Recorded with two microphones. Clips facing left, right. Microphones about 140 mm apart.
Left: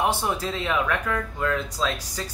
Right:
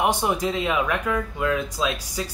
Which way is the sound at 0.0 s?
15° right (ahead or behind).